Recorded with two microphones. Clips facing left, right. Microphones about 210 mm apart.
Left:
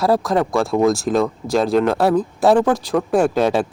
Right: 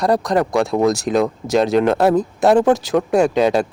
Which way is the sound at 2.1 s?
20° right (ahead or behind).